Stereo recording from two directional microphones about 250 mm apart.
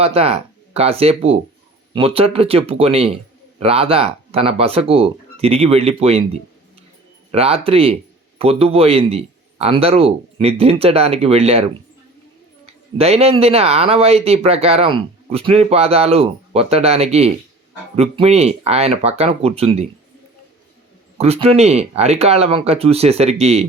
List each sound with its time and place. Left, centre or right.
0.0 s speech: right
13.0 s speech: right
21.2 s speech: right